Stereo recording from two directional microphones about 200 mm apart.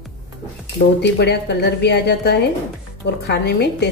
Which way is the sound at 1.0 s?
55° left (ahead or behind).